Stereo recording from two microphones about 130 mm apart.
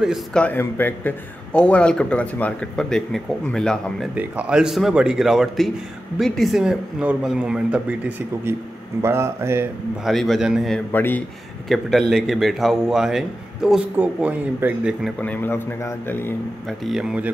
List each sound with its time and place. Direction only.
0.0 s a man's voice: 5° right (ahead or behind)
0.4 s a man's voice: 15° left (ahead or behind)
4.1 s a man's voice: 10° right (ahead or behind)
10.0 s a man's voice: centre (ahead or behind)
10.9 s a man's voice: 15° left (ahead or behind)
11.7 s a man's voice: centre (ahead or behind)
15.1 s a man's voice: 15° left (ahead or behind)
16.6 s a man's voice: centre (ahead or behind)